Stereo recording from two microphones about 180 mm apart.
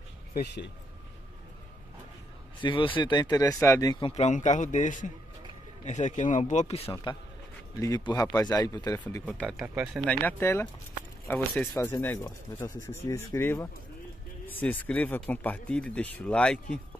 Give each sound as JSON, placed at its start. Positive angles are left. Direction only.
{"t": 0.3, "sound": "speech", "side_deg": 70}
{"t": 2.6, "sound": "speech", "side_deg": 25}
{"t": 3.9, "sound": "a man's voice", "side_deg": 35}